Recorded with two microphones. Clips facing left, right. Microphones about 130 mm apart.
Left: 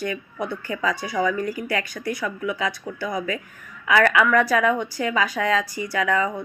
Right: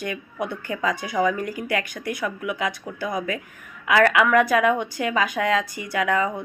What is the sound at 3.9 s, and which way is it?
Speech, 30° right (ahead or behind).